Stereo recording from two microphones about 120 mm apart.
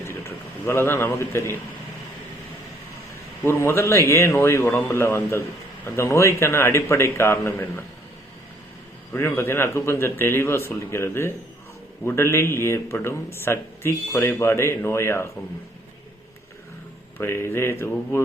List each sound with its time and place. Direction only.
0.0 s a sound: 20° left (ahead or behind)
3.4 s speech: 20° left (ahead or behind)
9.1 s speech: 20° left (ahead or behind)
17.2 s speech: 20° left (ahead or behind)